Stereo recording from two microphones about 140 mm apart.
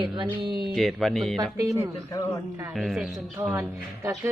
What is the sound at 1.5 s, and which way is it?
Speech, 25° right (ahead or behind).